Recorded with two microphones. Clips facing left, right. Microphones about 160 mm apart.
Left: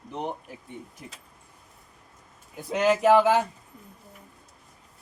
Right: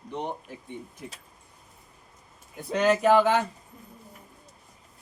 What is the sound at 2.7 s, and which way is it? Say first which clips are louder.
Speech: left 1 dB; 5° left (ahead or behind).